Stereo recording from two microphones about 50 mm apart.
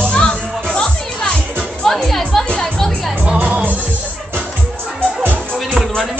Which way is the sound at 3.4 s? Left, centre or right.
Right.